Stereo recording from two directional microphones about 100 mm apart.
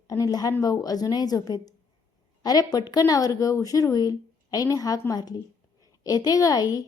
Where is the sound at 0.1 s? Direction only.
35° left (ahead or behind).